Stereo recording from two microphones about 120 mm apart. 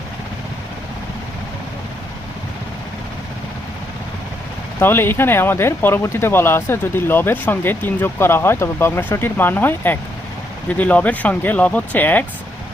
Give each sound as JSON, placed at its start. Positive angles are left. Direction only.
{"t": 4.8, "sound": "speech", "side_deg": 20}